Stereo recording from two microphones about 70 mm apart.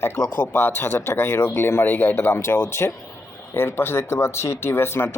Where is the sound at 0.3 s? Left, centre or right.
Left.